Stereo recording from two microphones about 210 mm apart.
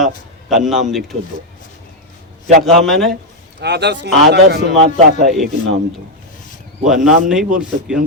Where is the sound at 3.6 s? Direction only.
55° right (ahead or behind).